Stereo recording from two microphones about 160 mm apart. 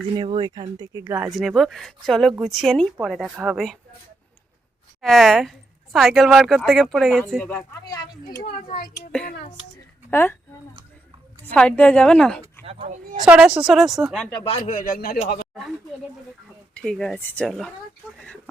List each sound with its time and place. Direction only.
0.2 s speech: 30° right (ahead or behind); by 1.3 s 15° right (ahead or behind)
1.3 s a woman's voice: centre (ahead or behind)
5.0 s a woman's voice: centre (ahead or behind)
7.9 s speech: 25° left (ahead or behind)
10.1 s a woman's voice: 15° left (ahead or behind)
11.5 s a woman's voice: 5° left (ahead or behind)
12.6 s speech: 45° right (ahead or behind)
13.2 s a woman's voice: 5° right (ahead or behind)
14.6 s speech: 55° left (ahead or behind)
16.7 s a woman's voice: 5° left (ahead or behind)